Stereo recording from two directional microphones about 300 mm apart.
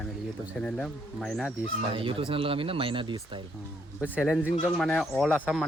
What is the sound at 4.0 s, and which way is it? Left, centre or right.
Speech, centre.